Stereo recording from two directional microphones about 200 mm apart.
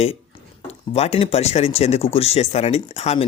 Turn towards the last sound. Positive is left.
turn(degrees=30)  # may be behind; listen again after turning